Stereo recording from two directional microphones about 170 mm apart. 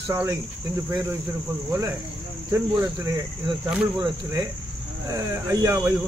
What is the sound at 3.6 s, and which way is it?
Speech, 5° right (ahead or behind).